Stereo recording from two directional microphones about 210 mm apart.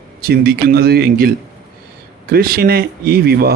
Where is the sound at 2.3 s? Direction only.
45° right (ahead or behind).